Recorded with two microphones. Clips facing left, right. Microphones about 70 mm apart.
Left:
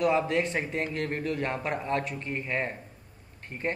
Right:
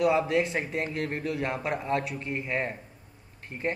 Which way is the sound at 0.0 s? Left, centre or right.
Centre.